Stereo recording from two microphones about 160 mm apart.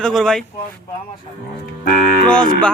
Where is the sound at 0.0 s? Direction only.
5° left (ahead or behind).